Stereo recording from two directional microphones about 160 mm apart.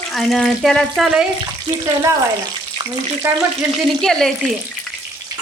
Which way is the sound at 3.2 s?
10° right (ahead or behind).